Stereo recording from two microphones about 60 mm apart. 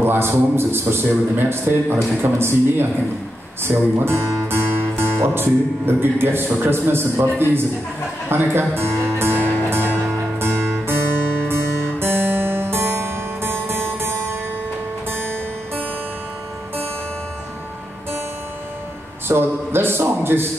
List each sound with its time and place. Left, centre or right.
0.0 s a man's voice: right
8.3 s music: right
19.2 s a sound: right